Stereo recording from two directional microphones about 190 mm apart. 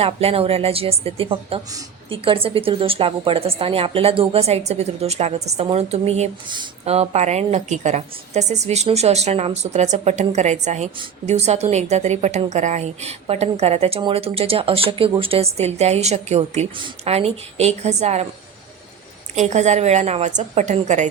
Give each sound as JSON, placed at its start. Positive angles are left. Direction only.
{"t": 0.0, "sound": "a woman's voice", "side_deg": -30}
{"t": 19.4, "sound": "a woman's voice", "side_deg": -35}